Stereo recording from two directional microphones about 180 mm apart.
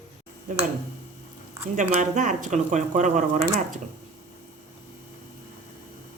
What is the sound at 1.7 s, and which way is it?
Speech, 45° right (ahead or behind).